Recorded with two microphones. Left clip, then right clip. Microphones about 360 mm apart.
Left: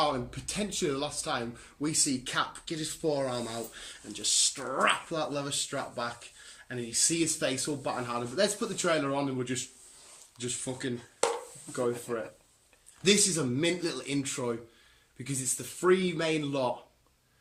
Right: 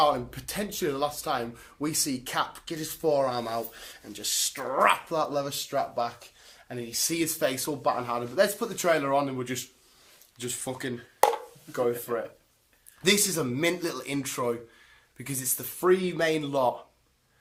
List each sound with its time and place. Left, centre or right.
0.0 s speech: centre
13.0 s speech: centre